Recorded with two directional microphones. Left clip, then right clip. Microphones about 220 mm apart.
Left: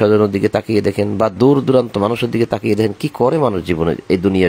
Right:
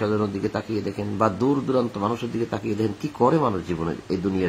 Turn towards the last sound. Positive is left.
turn(degrees=40)  # may be behind; listen again after turning